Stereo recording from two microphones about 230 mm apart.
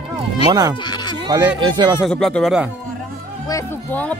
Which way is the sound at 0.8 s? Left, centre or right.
Centre.